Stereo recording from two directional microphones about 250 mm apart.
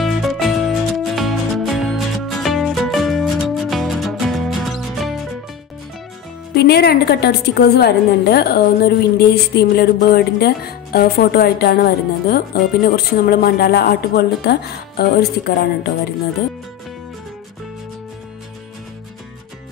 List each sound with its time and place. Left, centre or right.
0.0 s music: centre
6.5 s a woman's voice: left